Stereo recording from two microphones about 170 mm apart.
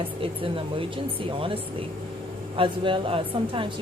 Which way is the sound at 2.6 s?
30° right (ahead or behind).